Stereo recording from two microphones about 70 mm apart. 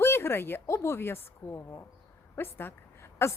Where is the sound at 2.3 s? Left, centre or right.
Left.